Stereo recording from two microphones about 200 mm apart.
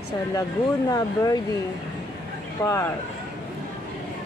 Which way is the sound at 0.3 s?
15° left (ahead or behind).